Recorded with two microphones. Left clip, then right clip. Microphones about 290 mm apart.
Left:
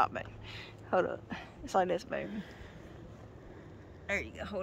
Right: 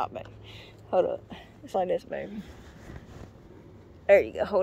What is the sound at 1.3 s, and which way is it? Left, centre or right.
Speech, centre.